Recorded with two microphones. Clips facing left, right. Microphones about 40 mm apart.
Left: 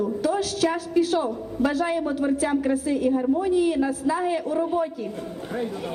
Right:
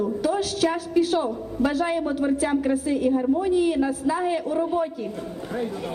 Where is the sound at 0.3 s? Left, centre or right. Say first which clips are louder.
Even; right.